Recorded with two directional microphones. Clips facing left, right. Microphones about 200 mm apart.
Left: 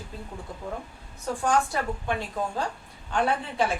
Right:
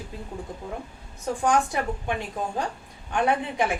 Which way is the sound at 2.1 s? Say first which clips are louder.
Even; 15° right (ahead or behind).